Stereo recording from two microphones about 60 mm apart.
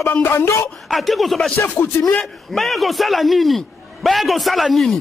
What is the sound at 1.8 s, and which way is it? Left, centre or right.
Speech, left.